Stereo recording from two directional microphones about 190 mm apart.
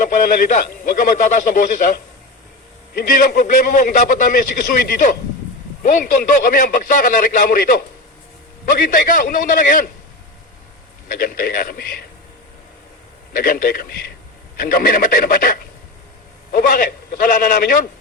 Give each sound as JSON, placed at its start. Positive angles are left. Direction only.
{"t": 0.0, "sound": "a man's voice", "side_deg": 45}
{"t": 2.9, "sound": "a man's voice", "side_deg": 45}
{"t": 11.1, "sound": "a man's voice", "side_deg": 50}
{"t": 13.3, "sound": "a man's voice", "side_deg": 50}